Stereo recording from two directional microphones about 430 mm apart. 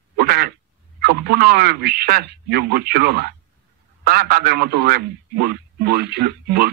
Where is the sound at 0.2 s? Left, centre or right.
Right.